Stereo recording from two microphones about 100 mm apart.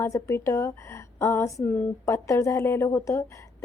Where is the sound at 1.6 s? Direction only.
20° left (ahead or behind).